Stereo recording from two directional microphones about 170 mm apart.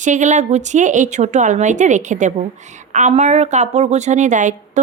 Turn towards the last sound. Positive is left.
turn(degrees=-45)  # may be behind; listen again after turning